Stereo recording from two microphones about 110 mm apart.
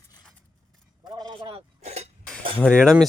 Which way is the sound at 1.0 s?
35° right (ahead or behind).